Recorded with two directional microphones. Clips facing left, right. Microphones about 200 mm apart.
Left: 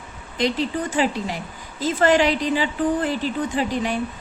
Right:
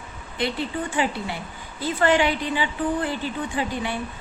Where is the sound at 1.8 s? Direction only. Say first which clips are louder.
Left 3 dB; 40° left (ahead or behind).